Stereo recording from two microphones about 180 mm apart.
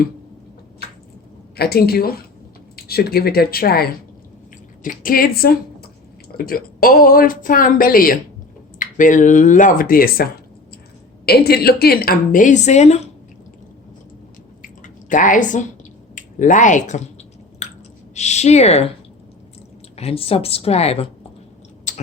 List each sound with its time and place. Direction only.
0.8 s a sound: 60° left (ahead or behind)
1.5 s speech: 60° left (ahead or behind)
4.8 s speech: 50° left (ahead or behind)
11.3 s speech: 60° left (ahead or behind); by 13.0 s 40° left (ahead or behind)
14.6 s drip: 45° left (ahead or behind)
16.1 s speech: 45° left (ahead or behind)
17.6 s a sound: 35° left (ahead or behind)
18.1 s a woman's voice: 40° left (ahead or behind)
20.0 s a woman's voice: 35° left (ahead or behind)
21.9 s a sound: 40° left (ahead or behind)